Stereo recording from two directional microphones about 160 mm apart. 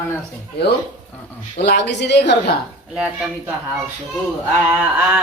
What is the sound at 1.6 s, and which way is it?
Speech, 90° left.